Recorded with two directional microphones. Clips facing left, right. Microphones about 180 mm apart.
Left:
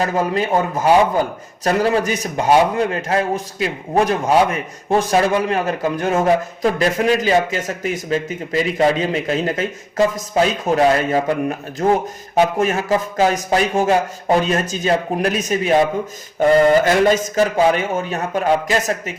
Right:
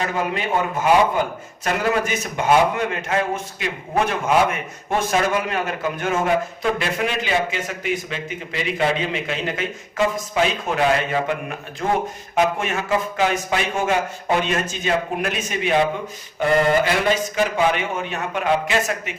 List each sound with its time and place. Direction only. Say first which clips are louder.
0.0 s a man's voice: left 5 dB; 40° left (ahead or behind)